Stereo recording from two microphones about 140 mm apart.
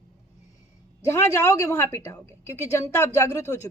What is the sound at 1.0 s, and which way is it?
Speech, 20° left (ahead or behind).